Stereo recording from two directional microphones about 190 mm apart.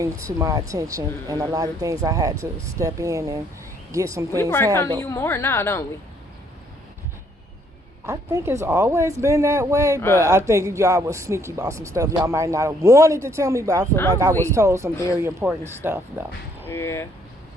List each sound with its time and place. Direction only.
0.0 s a man's voice: 15° right (ahead or behind)
4.3 s a woman's voice: 15° left (ahead or behind)
8.0 s a man's voice: 15° right (ahead or behind)
14.9 s a woman's voice: 15° left (ahead or behind)
15.2 s a man's voice: 15° right (ahead or behind)
16.6 s a woman's voice: 15° left (ahead or behind)